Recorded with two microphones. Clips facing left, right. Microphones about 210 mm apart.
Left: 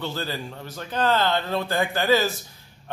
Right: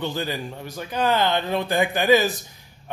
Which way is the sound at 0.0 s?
15° right (ahead or behind).